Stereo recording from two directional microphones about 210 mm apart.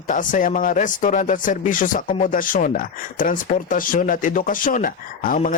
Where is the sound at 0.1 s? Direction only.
40° left (ahead or behind).